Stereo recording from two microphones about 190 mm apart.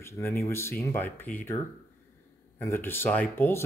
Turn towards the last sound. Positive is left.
turn(degrees=10)  # may be behind; listen again after turning